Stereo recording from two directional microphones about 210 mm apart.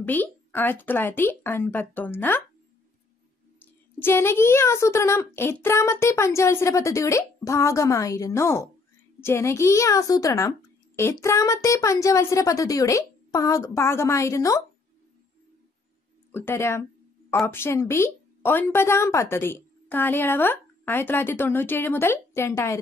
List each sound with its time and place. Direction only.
0.0 s speech: 10° left (ahead or behind)
4.0 s speech: 10° left (ahead or behind)
16.3 s speech: 10° left (ahead or behind)